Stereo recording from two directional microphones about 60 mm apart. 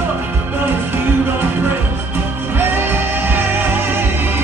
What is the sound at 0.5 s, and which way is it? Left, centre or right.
Music, right.